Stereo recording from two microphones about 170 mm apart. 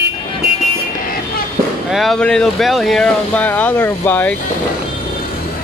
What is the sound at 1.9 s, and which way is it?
Speech, centre (ahead or behind).